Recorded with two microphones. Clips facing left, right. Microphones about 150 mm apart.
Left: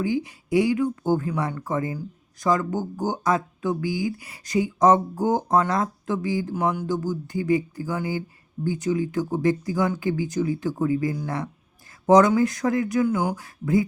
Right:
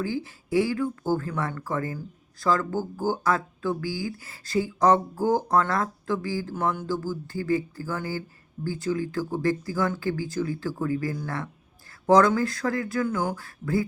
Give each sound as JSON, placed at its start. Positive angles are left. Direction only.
{"t": 0.0, "sound": "speech", "side_deg": 15}